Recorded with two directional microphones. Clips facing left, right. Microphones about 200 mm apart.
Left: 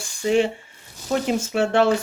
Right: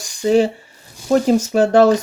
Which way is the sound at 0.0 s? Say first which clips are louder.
Right 5 dB; 40° right (ahead or behind).